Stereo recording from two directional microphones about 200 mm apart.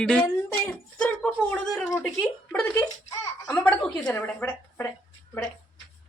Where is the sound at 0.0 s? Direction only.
5° left (ahead or behind).